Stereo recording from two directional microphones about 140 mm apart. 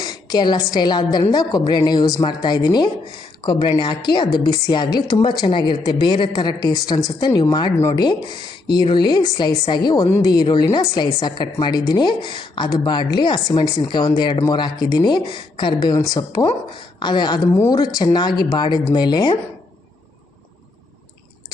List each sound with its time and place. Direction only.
0.0 s a woman's voice: 30° left (ahead or behind)